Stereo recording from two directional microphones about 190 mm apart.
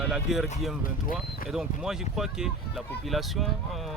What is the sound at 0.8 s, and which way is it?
Speech, 45° left (ahead or behind).